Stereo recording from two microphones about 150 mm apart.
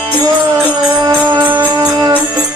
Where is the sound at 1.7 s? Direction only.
25° right (ahead or behind).